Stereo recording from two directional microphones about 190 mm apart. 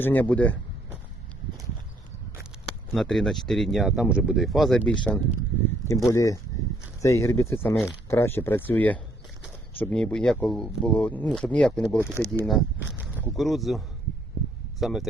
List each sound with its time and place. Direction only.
0.0 s speech: 10° left (ahead or behind)
2.9 s speech: centre (ahead or behind)
5.9 s speech: 15° left (ahead or behind)
12.3 s speech: centre (ahead or behind)